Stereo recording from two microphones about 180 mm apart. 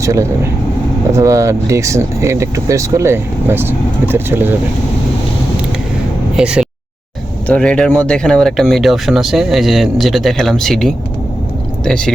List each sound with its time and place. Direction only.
0.0 s speech: 15° right (ahead or behind)
6.3 s speech: 5° right (ahead or behind)
7.4 s speech: 5° left (ahead or behind)